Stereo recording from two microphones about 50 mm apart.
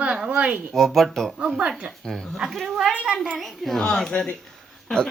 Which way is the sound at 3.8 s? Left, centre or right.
Centre.